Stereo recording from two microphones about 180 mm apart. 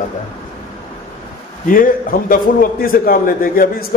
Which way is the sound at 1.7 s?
50° left (ahead or behind).